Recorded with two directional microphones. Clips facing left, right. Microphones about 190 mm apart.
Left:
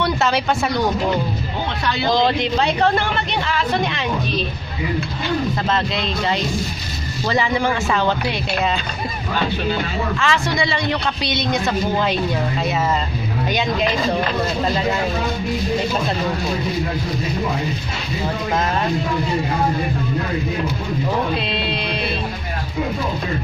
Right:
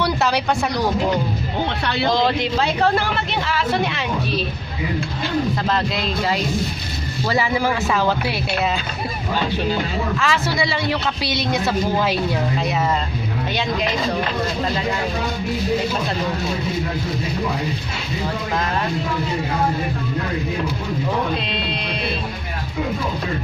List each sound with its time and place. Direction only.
0.0 s speech: centre (ahead or behind)
2.1 s speech: centre (ahead or behind)
5.7 s speech: centre (ahead or behind)
10.1 s speech: 5° right (ahead or behind)
13.5 s speech: 20° left (ahead or behind)
21.4 s music: 5° left (ahead or behind)